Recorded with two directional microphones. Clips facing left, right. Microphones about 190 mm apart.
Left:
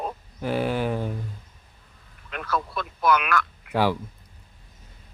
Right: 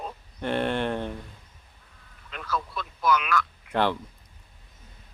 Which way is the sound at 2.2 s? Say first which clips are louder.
Left 3 dB; 60° left (ahead or behind).